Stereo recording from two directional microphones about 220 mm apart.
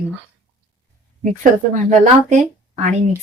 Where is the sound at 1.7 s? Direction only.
35° right (ahead or behind).